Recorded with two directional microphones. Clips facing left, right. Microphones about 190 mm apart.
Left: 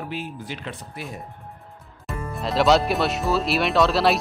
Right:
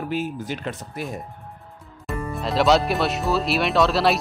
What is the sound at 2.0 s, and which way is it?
Speech, centre (ahead or behind).